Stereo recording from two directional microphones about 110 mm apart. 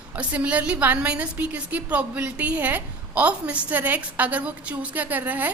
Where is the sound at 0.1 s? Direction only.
15° right (ahead or behind).